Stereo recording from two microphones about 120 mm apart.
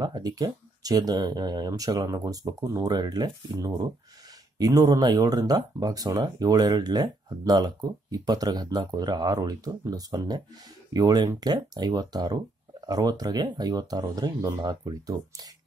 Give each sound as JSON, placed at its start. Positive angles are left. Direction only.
{"t": 0.0, "sound": "speech", "side_deg": -35}